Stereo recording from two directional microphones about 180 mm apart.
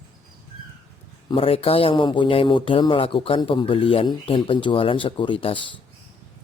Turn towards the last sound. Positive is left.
turn(degrees=30)  # may be behind; listen again after turning